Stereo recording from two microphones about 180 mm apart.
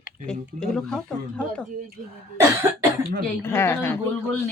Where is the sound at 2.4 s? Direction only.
15° right (ahead or behind).